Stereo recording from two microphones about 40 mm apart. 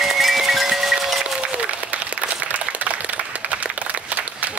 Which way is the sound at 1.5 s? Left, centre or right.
Right.